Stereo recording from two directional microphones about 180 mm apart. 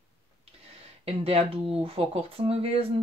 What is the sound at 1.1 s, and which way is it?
Speech, 35° right (ahead or behind).